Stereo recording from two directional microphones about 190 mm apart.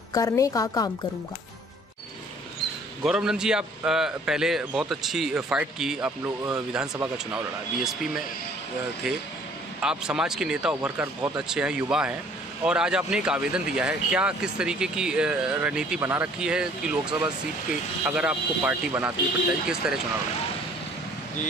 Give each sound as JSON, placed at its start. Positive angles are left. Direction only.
{"t": 0.1, "sound": "a woman's voice", "side_deg": 20}
{"t": 3.0, "sound": "a man's voice", "side_deg": -5}
{"t": 9.8, "sound": "a man's voice", "side_deg": -5}